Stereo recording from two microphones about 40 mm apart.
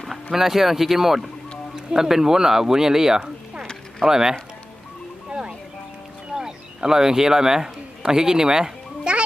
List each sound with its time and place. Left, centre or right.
0.0 s a sound: centre
0.3 s speech: centre
5.3 s music: centre
6.3 s a man's voice: centre